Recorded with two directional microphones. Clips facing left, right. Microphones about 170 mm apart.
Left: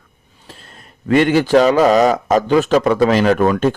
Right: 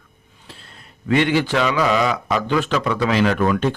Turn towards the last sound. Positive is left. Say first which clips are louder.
# left 5 dB
turn(degrees=45)  # may be behind; listen again after turning